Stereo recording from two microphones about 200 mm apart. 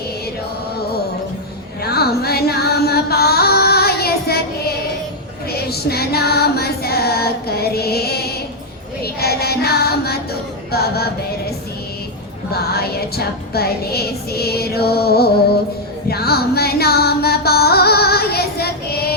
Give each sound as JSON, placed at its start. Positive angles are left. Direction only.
{"t": 1.8, "sound": "music", "side_deg": 50}
{"t": 5.5, "sound": "music", "side_deg": 50}
{"t": 12.5, "sound": "music", "side_deg": 50}